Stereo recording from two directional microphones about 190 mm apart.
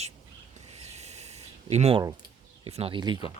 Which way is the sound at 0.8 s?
35° right (ahead or behind).